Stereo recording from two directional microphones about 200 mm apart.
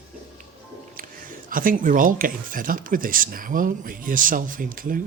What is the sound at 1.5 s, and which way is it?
Speech, 45° right (ahead or behind).